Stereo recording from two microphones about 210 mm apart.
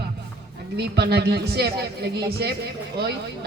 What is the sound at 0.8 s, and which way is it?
A woman's voice, 50° right (ahead or behind).